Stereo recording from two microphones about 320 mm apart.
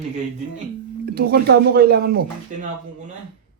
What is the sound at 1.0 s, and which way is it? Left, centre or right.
Speech, right.